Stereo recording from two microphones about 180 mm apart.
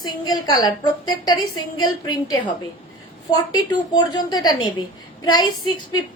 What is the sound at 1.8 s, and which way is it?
A woman's voice, 20° left (ahead or behind).